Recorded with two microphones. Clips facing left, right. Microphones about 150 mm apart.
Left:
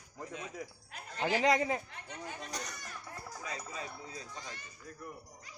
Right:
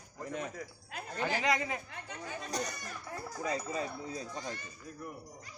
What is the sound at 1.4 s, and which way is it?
Speech, 30° left (ahead or behind).